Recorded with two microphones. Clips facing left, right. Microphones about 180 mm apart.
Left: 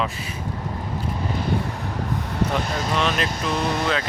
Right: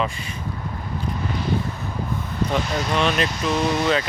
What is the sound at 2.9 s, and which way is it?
Speech, centre (ahead or behind).